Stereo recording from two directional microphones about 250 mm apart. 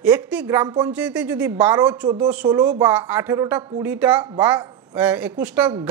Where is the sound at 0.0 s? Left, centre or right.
Centre.